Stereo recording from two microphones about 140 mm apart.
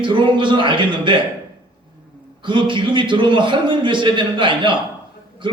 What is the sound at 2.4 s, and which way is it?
A man's voice, 35° right (ahead or behind).